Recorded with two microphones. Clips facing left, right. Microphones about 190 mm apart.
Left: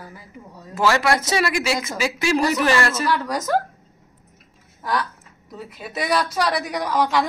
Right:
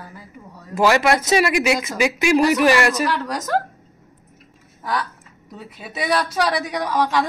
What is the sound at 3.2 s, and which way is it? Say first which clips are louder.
Speech: left 1 dB; 10° left (ahead or behind).